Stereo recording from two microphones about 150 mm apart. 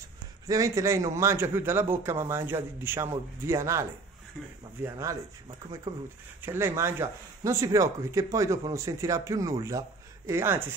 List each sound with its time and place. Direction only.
0.5 s speech: 20° right (ahead or behind)
4.8 s speech: 20° right (ahead or behind)